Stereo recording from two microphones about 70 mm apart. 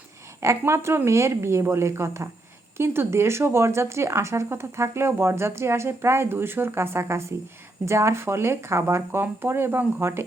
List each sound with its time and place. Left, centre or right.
0.4 s speech: right